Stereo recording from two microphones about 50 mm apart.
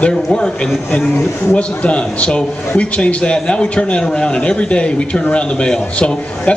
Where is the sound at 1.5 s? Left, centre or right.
Left.